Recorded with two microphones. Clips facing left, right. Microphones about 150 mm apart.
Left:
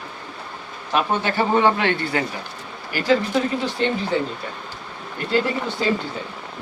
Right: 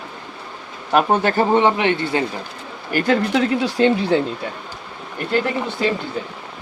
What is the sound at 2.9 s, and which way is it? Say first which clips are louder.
Speech: right 2 dB; 55° right (ahead or behind).